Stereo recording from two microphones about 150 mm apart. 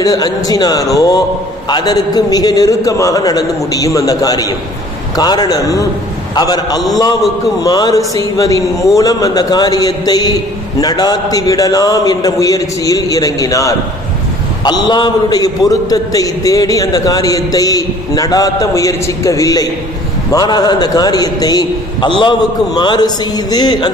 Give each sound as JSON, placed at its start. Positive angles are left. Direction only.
{"t": 0.0, "sound": "a man's voice", "side_deg": 25}